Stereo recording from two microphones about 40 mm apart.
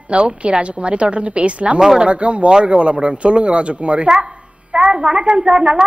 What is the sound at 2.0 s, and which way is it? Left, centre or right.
A woman's voice, right.